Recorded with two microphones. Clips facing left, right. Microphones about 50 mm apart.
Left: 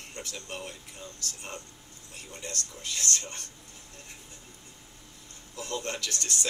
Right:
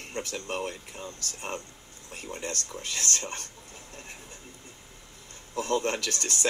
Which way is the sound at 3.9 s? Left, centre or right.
Right.